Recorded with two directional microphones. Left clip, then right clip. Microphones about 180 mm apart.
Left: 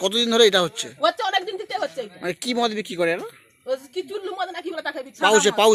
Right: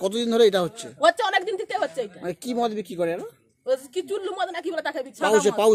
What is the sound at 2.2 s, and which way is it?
Speech, 5° left (ahead or behind).